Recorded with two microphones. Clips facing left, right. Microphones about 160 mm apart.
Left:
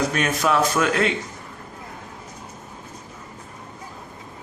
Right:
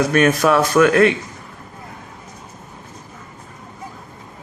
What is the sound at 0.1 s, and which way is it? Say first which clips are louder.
A man's voice: right 7 dB; 55° right (ahead or behind).